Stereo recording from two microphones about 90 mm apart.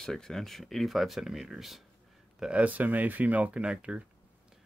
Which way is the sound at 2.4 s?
15° right (ahead or behind).